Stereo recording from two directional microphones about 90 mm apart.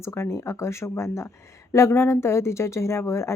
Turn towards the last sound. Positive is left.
turn(degrees=30)  # may be behind; listen again after turning